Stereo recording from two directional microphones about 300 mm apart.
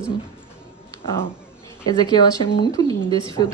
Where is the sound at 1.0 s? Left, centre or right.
Centre.